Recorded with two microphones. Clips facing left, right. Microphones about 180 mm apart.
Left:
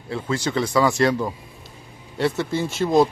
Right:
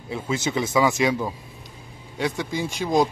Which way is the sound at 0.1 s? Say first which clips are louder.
Left 1 dB; 20° right (ahead or behind).